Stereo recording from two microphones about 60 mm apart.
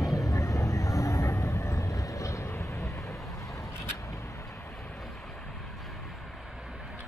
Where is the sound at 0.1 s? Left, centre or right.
Left.